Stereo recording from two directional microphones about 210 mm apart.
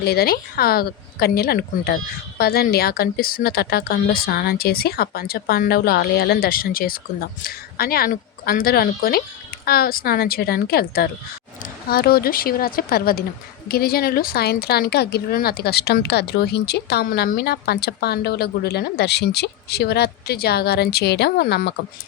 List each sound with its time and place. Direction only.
0.0 s speech: 50° left (ahead or behind)